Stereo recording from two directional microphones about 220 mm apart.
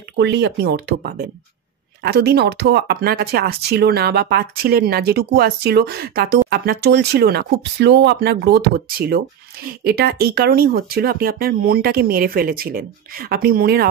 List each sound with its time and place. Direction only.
0.2 s speech: 50° right (ahead or behind)